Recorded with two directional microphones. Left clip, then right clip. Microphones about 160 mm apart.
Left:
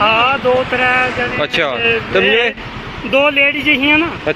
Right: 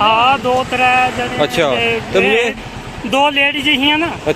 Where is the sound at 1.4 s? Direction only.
15° right (ahead or behind).